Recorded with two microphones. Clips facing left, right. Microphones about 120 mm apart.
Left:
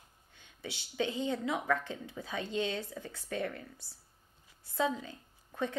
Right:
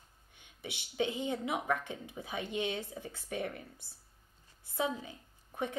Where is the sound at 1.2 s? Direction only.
20° right (ahead or behind).